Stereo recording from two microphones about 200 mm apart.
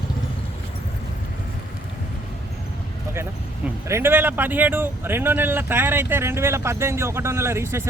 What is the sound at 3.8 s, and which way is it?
Speech, 10° right (ahead or behind).